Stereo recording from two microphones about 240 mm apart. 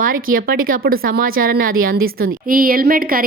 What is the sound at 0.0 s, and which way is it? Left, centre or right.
Speech, right.